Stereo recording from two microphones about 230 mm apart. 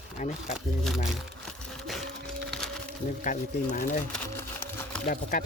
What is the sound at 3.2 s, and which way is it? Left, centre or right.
Speech, left.